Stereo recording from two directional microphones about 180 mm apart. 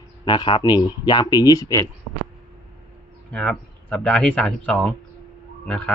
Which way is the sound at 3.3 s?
5° left (ahead or behind).